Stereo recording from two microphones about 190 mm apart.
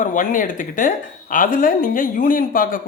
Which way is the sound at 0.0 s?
45° left (ahead or behind).